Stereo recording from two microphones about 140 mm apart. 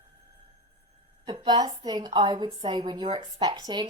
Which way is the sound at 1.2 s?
35° right (ahead or behind).